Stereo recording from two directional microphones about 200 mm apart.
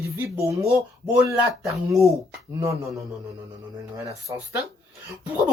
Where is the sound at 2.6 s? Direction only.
15° right (ahead or behind).